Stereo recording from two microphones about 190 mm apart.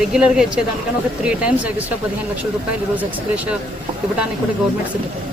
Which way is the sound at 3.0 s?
5° right (ahead or behind).